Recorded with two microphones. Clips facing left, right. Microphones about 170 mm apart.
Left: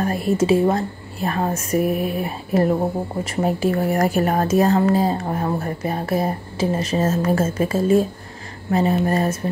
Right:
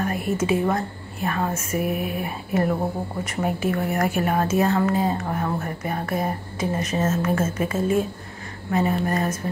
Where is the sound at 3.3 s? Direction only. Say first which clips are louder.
Left 4 dB; 30° left (ahead or behind).